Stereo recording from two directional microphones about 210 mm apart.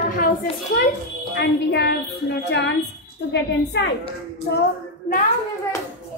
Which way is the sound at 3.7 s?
55° left (ahead or behind).